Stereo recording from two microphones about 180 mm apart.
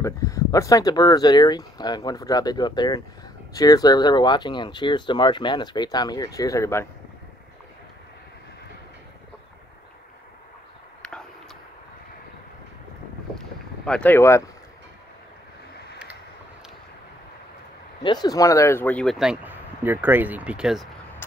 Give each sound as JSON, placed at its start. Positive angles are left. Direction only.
{"t": 0.0, "sound": "speech", "side_deg": 20}
{"t": 11.0, "sound": "a sound", "side_deg": 5}
{"t": 13.8, "sound": "speech", "side_deg": 5}
{"t": 18.0, "sound": "speech", "side_deg": 25}